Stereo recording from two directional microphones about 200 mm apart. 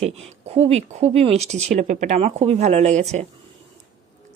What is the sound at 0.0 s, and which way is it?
Speech, 30° right (ahead or behind).